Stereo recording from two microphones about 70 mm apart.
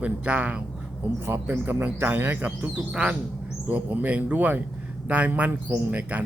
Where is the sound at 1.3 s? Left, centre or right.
Right.